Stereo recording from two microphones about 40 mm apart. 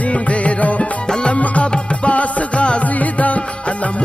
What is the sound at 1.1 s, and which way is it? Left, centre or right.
Music, left.